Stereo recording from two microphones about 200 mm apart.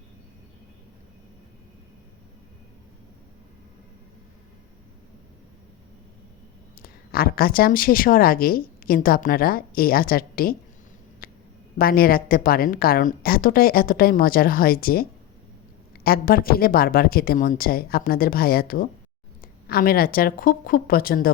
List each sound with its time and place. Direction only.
6.8 s speech: 50° left (ahead or behind)
11.2 s quack: 45° left (ahead or behind)
11.8 s speech: 45° left (ahead or behind)
16.0 s speech: 45° left (ahead or behind)